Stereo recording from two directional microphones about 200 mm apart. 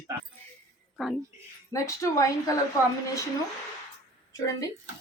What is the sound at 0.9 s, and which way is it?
Speech, centre (ahead or behind).